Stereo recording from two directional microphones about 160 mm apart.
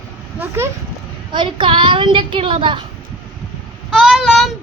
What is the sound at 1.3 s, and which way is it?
A child's voice, 30° right (ahead or behind).